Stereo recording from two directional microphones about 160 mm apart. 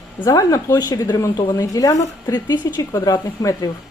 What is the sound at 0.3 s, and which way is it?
Speech, 20° left (ahead or behind).